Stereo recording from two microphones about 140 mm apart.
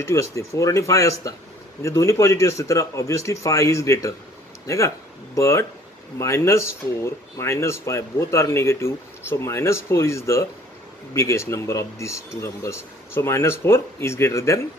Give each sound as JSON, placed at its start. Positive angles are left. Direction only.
{"t": 0.0, "sound": "speech", "side_deg": 20}